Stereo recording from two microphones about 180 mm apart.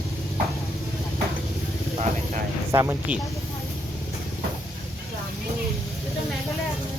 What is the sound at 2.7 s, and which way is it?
Speech, 15° right (ahead or behind).